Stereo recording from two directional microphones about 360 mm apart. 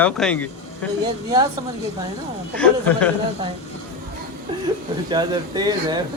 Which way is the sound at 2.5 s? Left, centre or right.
Centre.